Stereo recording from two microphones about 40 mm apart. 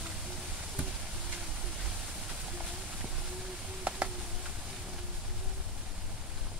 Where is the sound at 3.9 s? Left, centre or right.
Right.